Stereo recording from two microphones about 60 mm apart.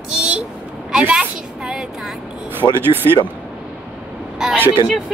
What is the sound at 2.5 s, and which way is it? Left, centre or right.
Speech, right.